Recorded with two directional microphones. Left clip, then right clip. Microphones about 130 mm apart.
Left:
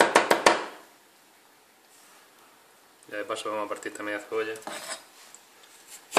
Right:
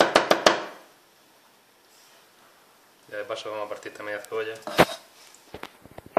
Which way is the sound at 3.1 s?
45° left (ahead or behind).